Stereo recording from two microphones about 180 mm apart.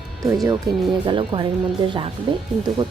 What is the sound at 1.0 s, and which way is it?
Speech, 25° right (ahead or behind).